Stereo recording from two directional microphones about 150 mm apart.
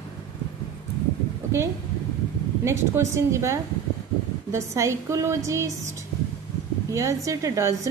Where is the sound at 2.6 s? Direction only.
20° right (ahead or behind).